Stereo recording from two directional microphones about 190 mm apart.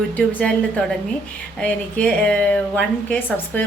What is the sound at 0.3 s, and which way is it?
A woman's voice, 5° left (ahead or behind).